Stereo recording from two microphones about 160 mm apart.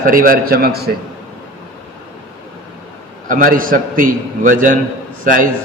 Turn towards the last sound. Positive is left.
turn(degrees=-60)  # may be behind; listen again after turning